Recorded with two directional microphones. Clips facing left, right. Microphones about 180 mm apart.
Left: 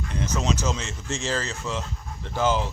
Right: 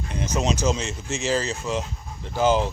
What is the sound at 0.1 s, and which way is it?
Speech, 15° right (ahead or behind).